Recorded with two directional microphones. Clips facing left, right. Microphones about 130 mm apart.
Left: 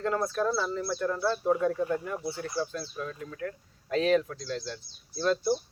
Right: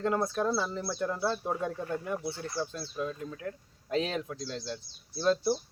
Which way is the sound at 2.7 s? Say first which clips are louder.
Right 1 dB; 20° right (ahead or behind).